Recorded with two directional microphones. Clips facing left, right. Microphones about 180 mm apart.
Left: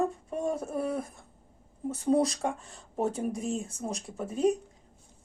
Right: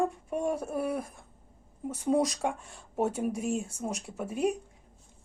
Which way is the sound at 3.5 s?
25° left (ahead or behind).